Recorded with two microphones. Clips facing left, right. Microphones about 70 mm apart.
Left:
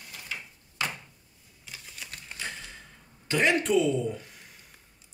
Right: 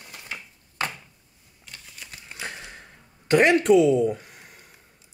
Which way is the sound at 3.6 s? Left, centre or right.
Right.